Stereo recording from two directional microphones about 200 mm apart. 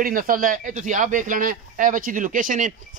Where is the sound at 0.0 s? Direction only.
45° right (ahead or behind).